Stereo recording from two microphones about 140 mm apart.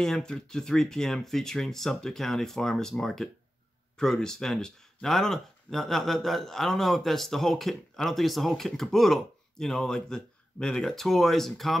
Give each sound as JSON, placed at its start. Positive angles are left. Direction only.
{"t": 0.0, "sound": "speech", "side_deg": 5}